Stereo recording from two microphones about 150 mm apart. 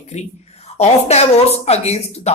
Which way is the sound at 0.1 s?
50° left (ahead or behind).